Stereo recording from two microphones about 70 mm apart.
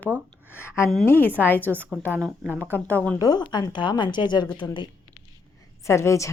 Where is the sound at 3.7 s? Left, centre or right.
Left.